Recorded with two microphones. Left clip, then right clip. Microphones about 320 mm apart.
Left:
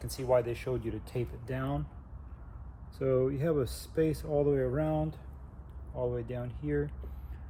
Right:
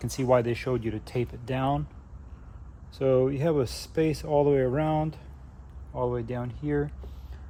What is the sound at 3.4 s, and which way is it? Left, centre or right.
Speech, centre.